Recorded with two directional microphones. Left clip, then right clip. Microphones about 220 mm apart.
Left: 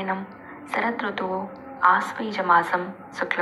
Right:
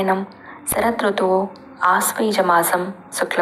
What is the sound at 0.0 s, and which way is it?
A woman's voice, 50° right (ahead or behind).